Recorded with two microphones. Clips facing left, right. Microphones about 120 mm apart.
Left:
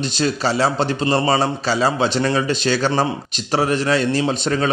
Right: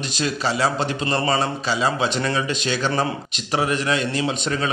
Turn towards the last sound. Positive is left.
turn(degrees=35)  # may be behind; listen again after turning